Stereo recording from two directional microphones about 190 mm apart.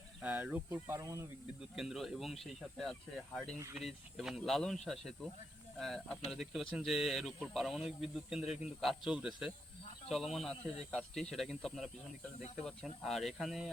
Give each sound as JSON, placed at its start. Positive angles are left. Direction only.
{"t": 0.2, "sound": "speech", "side_deg": -10}
{"t": 1.7, "sound": "speech", "side_deg": 0}
{"t": 13.0, "sound": "speech", "side_deg": 0}